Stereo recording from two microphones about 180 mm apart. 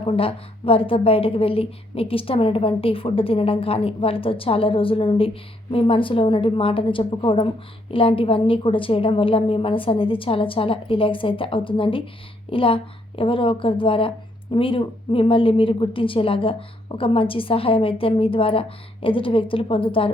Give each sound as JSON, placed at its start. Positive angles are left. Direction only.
{"t": 0.0, "sound": "a woman's voice", "side_deg": 30}